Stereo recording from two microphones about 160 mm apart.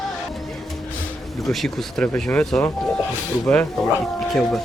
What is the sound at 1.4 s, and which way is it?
Speech, centre (ahead or behind).